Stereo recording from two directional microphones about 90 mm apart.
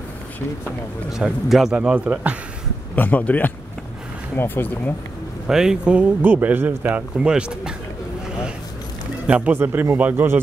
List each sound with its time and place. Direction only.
1.1 s a man's voice: 5° right (ahead or behind)
3.0 s speech: 15° left (ahead or behind)
5.5 s speech: 5° right (ahead or behind)
6.2 s speech: 20° right (ahead or behind)
9.3 s speech: 15° right (ahead or behind)